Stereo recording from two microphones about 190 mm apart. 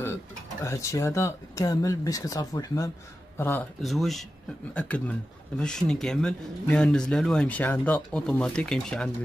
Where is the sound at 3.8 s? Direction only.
Centre (ahead or behind).